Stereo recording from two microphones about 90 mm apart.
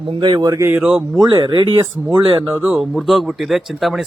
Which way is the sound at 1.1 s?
50° right (ahead or behind).